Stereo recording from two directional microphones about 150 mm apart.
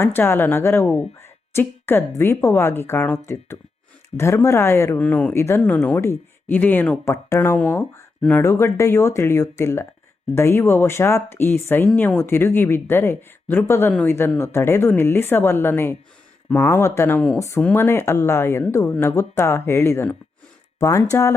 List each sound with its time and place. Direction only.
0.0 s speech: 15° left (ahead or behind)